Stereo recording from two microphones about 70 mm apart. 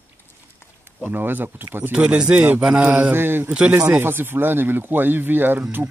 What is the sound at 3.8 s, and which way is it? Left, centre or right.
Speech, right.